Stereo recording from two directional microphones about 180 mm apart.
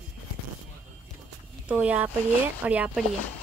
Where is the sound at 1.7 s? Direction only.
5° right (ahead or behind).